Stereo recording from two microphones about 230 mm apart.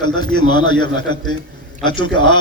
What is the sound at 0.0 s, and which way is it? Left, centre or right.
A man's voice, centre.